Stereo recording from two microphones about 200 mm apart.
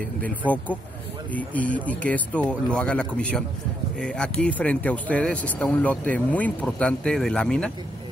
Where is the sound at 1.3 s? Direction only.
10° left (ahead or behind).